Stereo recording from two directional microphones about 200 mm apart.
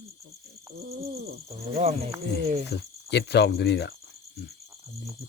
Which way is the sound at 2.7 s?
55° left (ahead or behind).